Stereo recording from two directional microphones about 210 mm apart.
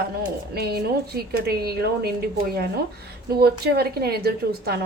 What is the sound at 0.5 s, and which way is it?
A woman's voice, 50° right (ahead or behind).